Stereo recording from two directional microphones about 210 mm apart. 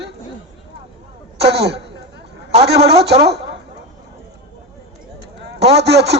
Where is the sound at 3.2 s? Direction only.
50° right (ahead or behind).